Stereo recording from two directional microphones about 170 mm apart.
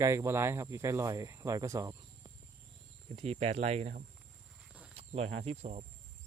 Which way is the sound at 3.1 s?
35° right (ahead or behind).